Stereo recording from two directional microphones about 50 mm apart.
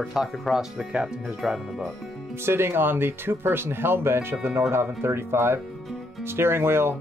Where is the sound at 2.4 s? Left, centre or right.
Right.